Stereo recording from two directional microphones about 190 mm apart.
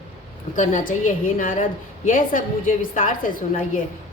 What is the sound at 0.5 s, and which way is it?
A woman's voice, 40° left (ahead or behind).